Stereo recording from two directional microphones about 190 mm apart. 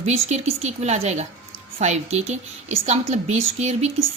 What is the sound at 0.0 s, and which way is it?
A woman's voice, 35° right (ahead or behind).